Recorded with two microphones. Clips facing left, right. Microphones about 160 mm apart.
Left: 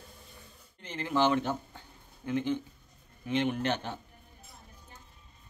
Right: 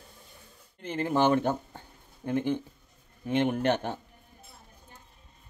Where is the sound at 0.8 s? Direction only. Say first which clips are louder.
Right 3 dB; 50° right (ahead or behind).